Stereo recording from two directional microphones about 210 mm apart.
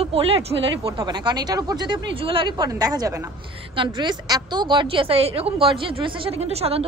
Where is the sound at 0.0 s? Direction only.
25° right (ahead or behind).